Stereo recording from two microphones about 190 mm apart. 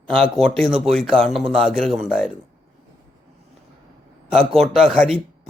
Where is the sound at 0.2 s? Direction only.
Centre (ahead or behind).